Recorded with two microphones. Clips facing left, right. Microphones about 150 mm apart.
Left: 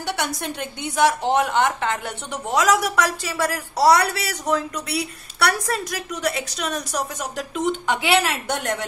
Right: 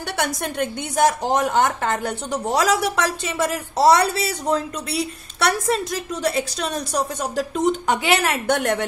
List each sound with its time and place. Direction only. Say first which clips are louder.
0.0 s a woman's voice: right 1 dB; 50° right (ahead or behind)